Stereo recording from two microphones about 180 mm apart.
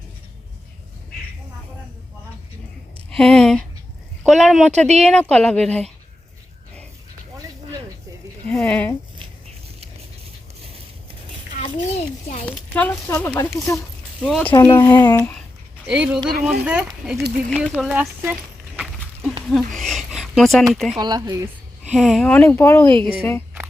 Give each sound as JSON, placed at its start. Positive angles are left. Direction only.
{"t": 3.1, "sound": "speech", "side_deg": 5}
{"t": 4.9, "sound": "speech", "side_deg": -35}
{"t": 5.1, "sound": "speech", "side_deg": 5}
{"t": 8.4, "sound": "speech", "side_deg": 5}
{"t": 11.6, "sound": "a child's voice", "side_deg": 35}
{"t": 12.7, "sound": "speech", "side_deg": 10}
{"t": 14.3, "sound": "speech", "side_deg": 5}
{"t": 14.5, "sound": "speech", "side_deg": 25}
{"t": 15.9, "sound": "speech", "side_deg": -5}
{"t": 19.5, "sound": "speech", "side_deg": 0}
{"t": 20.9, "sound": "speech", "side_deg": -20}
{"t": 21.8, "sound": "speech", "side_deg": 0}